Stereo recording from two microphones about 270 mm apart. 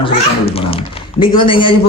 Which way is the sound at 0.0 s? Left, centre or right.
Centre.